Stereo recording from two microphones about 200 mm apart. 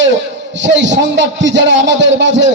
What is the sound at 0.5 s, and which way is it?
A man's voice, 65° right (ahead or behind).